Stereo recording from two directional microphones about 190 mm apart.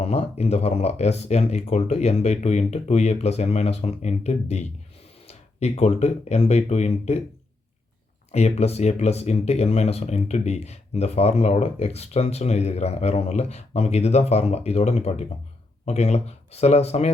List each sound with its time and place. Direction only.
0.0 s speech: 35° left (ahead or behind)
8.3 s speech: 35° left (ahead or behind)